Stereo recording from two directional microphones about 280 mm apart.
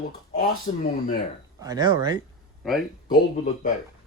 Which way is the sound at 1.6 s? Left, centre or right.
Centre.